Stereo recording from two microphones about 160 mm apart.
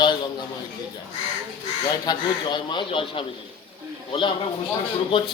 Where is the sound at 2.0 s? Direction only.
30° left (ahead or behind).